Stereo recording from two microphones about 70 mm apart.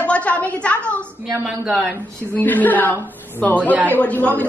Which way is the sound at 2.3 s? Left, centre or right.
Left.